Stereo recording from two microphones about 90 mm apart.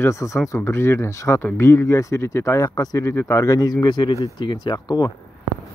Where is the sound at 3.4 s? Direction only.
45° left (ahead or behind).